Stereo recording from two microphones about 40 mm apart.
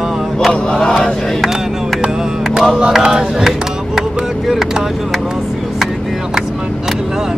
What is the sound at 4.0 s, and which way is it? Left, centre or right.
Vehicle, centre.